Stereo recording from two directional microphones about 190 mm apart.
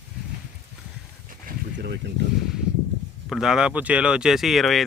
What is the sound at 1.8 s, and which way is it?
Speech, 65° right (ahead or behind).